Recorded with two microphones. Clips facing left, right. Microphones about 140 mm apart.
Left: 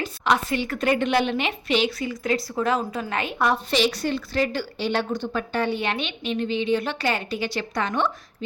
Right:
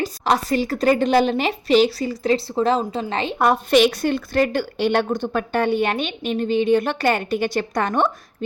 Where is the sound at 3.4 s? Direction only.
50° right (ahead or behind).